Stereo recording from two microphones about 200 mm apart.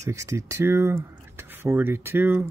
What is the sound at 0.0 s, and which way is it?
Speech, 15° right (ahead or behind).